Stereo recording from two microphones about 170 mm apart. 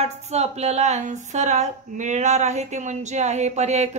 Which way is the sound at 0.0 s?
40° right (ahead or behind).